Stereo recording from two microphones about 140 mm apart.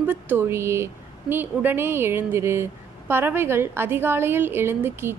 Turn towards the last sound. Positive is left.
turn(degrees=-15)  # may be behind; listen again after turning